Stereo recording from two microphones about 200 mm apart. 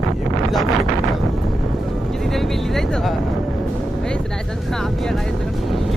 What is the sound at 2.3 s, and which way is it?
Speech, centre (ahead or behind).